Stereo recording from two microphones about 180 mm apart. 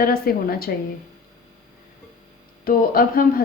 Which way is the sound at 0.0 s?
55° left (ahead or behind).